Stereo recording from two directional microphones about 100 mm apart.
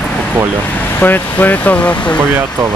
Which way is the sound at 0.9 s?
20° left (ahead or behind).